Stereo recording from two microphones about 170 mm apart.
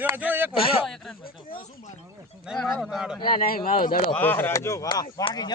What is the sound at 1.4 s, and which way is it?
Speech, 55° left (ahead or behind).